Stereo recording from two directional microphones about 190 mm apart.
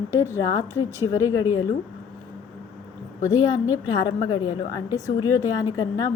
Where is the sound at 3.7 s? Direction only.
20° left (ahead or behind).